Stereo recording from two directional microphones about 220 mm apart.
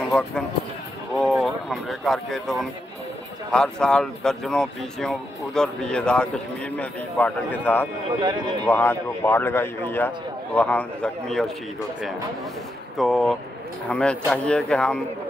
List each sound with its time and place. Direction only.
1.1 s speech: centre (ahead or behind)
8.2 s speech: 20° right (ahead or behind)
8.6 s a man's voice: 10° left (ahead or behind)
12.9 s speech: centre (ahead or behind)